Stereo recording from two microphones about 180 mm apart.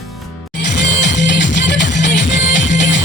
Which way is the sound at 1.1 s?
75° left (ahead or behind).